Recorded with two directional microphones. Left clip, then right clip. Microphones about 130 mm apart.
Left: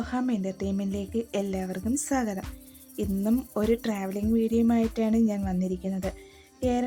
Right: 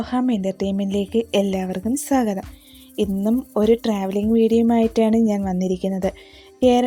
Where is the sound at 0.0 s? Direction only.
45° right (ahead or behind).